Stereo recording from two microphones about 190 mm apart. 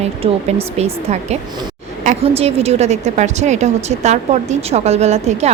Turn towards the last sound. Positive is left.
turn(degrees=-35)  # may be behind; listen again after turning